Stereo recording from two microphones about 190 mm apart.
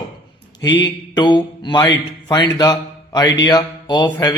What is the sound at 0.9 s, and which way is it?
Speech, 20° left (ahead or behind).